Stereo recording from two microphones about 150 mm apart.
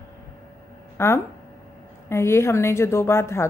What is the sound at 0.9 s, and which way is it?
A woman's voice, 15° left (ahead or behind).